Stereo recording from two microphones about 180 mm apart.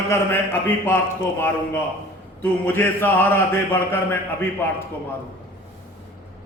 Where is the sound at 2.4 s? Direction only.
10° left (ahead or behind).